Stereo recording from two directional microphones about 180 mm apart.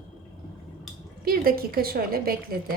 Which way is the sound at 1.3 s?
55° right (ahead or behind).